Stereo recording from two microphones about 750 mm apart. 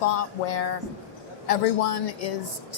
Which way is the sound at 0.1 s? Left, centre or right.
Left.